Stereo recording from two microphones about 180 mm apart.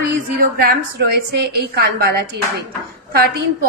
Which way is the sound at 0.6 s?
60° right (ahead or behind).